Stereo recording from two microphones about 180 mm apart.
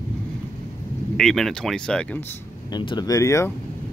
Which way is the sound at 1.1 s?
Centre (ahead or behind).